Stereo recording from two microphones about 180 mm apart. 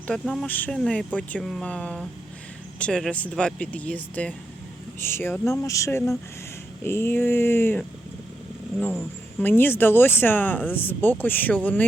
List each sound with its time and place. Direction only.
0.1 s speech: centre (ahead or behind)